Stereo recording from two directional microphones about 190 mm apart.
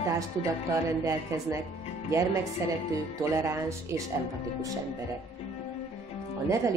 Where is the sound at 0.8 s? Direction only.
15° right (ahead or behind).